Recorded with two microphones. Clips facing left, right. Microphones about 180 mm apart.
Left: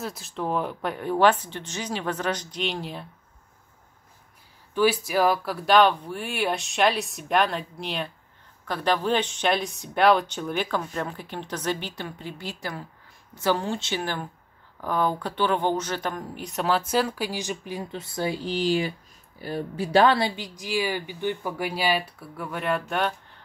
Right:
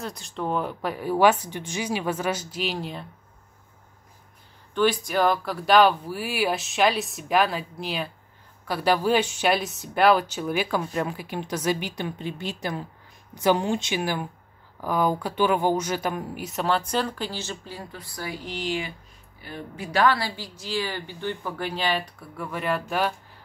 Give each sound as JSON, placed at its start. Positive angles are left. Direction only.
{"t": 0.0, "sound": "speech", "side_deg": 0}
{"t": 4.7, "sound": "speech", "side_deg": 5}